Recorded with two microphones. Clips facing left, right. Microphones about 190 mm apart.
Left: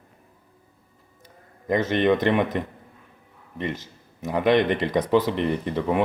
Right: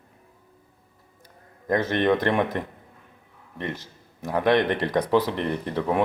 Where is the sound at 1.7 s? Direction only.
5° left (ahead or behind).